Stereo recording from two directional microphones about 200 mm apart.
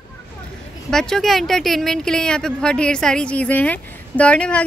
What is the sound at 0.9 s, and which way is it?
Speech, 5° left (ahead or behind).